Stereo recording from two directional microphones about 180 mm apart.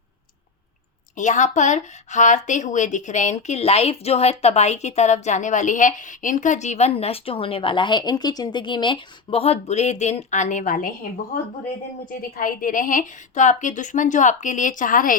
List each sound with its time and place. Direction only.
1.1 s a woman's voice: 45° left (ahead or behind)
12.4 s a woman's voice: 50° left (ahead or behind)